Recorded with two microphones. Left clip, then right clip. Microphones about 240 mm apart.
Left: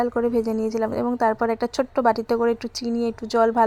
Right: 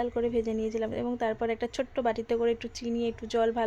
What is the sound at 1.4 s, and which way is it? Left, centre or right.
Speech, centre.